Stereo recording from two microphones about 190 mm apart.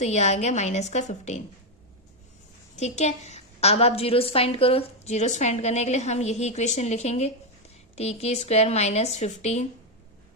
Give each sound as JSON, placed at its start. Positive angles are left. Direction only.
{"t": 0.0, "sound": "a woman's voice", "side_deg": 35}
{"t": 2.7, "sound": "a woman's voice", "side_deg": 35}